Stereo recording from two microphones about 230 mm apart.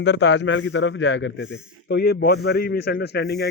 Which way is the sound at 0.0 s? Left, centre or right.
Left.